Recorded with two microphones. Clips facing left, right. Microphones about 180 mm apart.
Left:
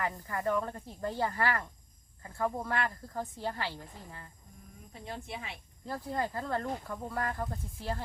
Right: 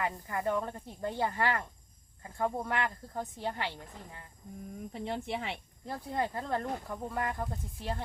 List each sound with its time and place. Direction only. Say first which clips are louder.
0.0 s speech: even; 20° right (ahead or behind)
4.9 s speech: right 6 dB; 75° right (ahead or behind)
5.8 s speech: even; 20° right (ahead or behind)